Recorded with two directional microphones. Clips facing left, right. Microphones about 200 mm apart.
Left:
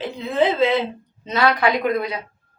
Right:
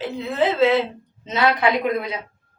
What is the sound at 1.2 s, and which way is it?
Speech, 20° right (ahead or behind).